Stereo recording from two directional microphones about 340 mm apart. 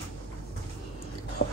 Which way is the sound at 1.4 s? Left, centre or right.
Left.